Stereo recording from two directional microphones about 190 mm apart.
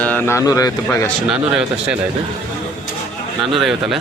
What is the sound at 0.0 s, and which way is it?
Speech, 10° left (ahead or behind).